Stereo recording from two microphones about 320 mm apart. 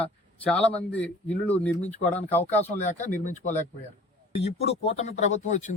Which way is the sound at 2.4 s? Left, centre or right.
Left.